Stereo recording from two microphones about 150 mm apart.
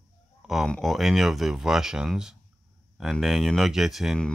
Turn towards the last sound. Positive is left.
turn(degrees=0)  # may be behind; listen again after turning